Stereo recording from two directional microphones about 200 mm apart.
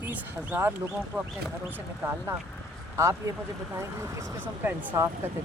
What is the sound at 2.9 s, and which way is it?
Speech, 15° right (ahead or behind).